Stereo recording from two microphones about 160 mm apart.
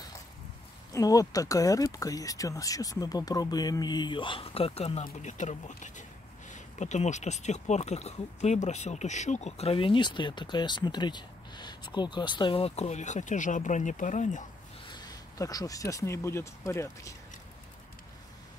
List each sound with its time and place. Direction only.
0.9 s speech: 20° left (ahead or behind); by 5.0 s 40° left (ahead or behind)
5.0 s speech: 50° left (ahead or behind)
14.9 s speech: 25° left (ahead or behind)